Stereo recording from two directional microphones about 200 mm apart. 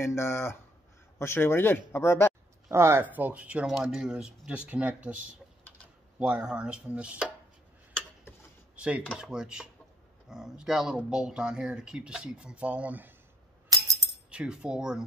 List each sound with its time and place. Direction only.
0.0 s speech: 15° left (ahead or behind)
2.7 s speech: 15° right (ahead or behind)
7.9 s a sound: 10° left (ahead or behind)
8.7 s speech: 5° right (ahead or behind)
13.7 s music: 20° right (ahead or behind)
14.3 s speech: 5° right (ahead or behind)